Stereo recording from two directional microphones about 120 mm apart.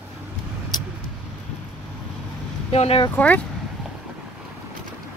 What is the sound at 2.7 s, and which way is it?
Speech, 55° left (ahead or behind).